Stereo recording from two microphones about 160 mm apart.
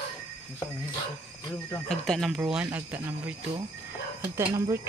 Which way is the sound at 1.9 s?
Centre (ahead or behind).